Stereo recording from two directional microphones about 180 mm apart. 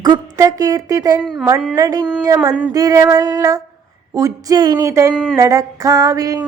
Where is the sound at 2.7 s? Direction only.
20° right (ahead or behind).